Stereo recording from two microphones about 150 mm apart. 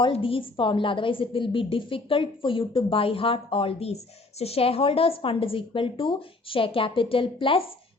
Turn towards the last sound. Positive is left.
turn(degrees=35)  # may be behind; listen again after turning